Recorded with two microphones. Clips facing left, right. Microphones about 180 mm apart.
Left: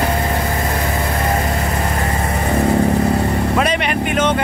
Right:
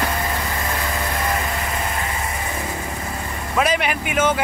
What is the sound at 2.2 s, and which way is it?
Vehicle, 65° left (ahead or behind).